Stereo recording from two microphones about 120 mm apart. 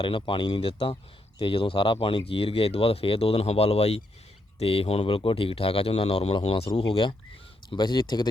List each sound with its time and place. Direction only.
0.2 s speech: 45° left (ahead or behind)